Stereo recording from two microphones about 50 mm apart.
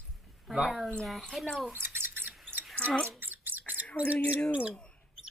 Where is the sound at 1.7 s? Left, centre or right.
Right.